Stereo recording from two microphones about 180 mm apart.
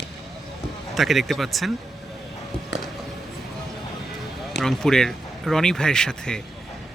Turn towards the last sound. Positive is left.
turn(degrees=5)  # may be behind; listen again after turning